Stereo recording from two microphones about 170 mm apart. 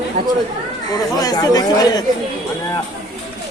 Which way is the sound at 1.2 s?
20° left (ahead or behind).